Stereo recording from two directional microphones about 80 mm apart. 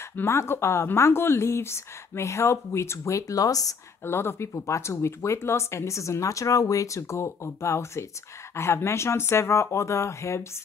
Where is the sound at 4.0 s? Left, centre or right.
Left.